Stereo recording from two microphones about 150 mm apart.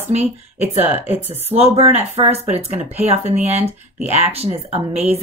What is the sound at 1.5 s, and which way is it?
Speech, 45° right (ahead or behind).